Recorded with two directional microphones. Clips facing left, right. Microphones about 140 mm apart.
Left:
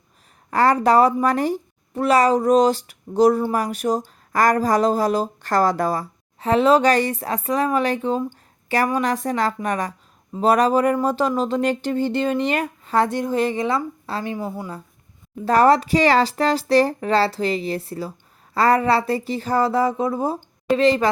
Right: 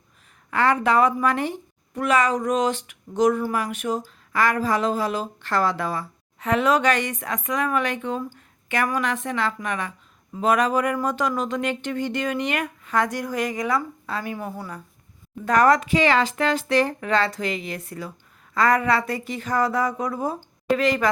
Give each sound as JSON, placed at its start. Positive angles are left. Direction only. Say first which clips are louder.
{"t": 0.5, "sound": "a woman's voice", "louder": "left 4 dB", "side_deg": 40}
{"t": 14.3, "sound": "speech", "louder": "left 4 dB", "side_deg": 15}
{"t": 15.4, "sound": "a woman's voice", "louder": "left 3 dB", "side_deg": 30}